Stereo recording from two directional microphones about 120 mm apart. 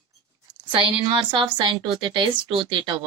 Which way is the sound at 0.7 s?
45° right (ahead or behind).